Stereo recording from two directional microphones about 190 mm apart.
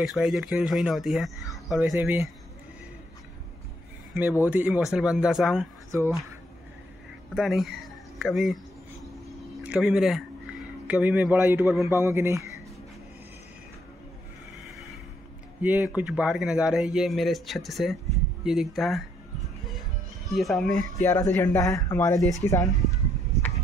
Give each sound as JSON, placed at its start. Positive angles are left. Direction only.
{"t": 0.0, "sound": "speech", "side_deg": 0}
{"t": 4.1, "sound": "speech", "side_deg": -10}
{"t": 7.3, "sound": "speech", "side_deg": 0}
{"t": 9.7, "sound": "speech", "side_deg": -5}
{"t": 15.6, "sound": "speech", "side_deg": -10}
{"t": 20.3, "sound": "speech", "side_deg": 0}